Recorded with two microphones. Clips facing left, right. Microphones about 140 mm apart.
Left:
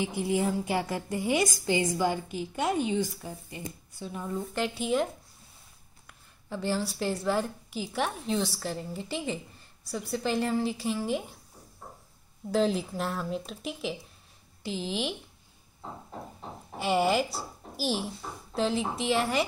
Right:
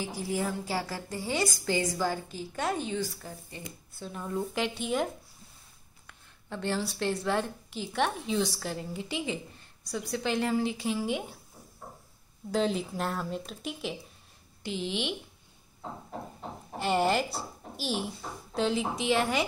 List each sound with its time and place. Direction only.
0.3 s a woman's voice: 20° left (ahead or behind)
4.0 s a woman's voice: 5° left (ahead or behind)
12.4 s a woman's voice: centre (ahead or behind)
16.7 s a woman's voice: 5° left (ahead or behind)